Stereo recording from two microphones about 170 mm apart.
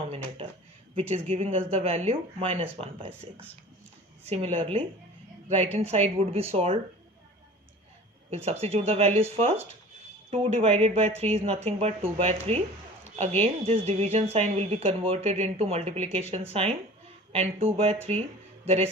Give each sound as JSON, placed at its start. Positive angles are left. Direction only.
{"t": 0.9, "sound": "speech", "side_deg": -35}
{"t": 4.3, "sound": "speech", "side_deg": -40}
{"t": 8.6, "sound": "speech", "side_deg": -40}